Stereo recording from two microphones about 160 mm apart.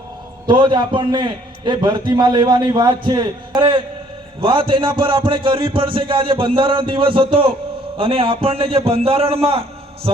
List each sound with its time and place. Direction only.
0.4 s a man's voice: 30° right (ahead or behind)